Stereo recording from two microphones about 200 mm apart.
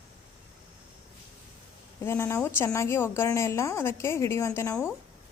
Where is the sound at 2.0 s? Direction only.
10° left (ahead or behind).